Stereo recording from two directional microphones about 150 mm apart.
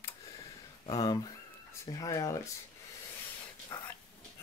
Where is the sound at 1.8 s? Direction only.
25° left (ahead or behind).